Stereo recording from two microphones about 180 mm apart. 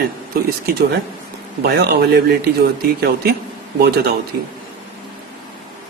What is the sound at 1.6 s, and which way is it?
Speech, 65° right (ahead or behind).